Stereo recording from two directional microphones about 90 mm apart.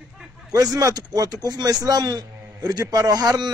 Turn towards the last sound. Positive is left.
turn(degrees=-50)  # may be behind; listen again after turning